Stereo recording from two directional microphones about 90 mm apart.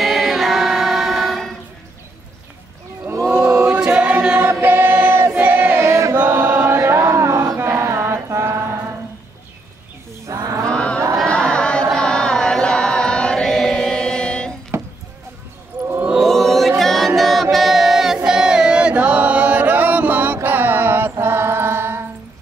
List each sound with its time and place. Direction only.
0.0 s music: centre (ahead or behind)
3.6 s choir: 10° right (ahead or behind); by 6.1 s 35° right (ahead or behind)
6.1 s chant: 15° right (ahead or behind)
6.8 s a sound: 30° right (ahead or behind)
10.2 s a sound: 40° right (ahead or behind)
10.7 s a sound: 10° left (ahead or behind)
11.2 s chant: 10° left (ahead or behind)
14.7 s chop: 30° right (ahead or behind)
16.2 s choir: centre (ahead or behind); by 20.3 s 20° right (ahead or behind)
20.4 s music: 20° right (ahead or behind)